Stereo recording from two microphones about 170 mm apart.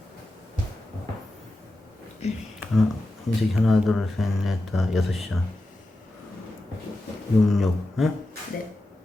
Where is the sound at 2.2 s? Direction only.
40° left (ahead or behind).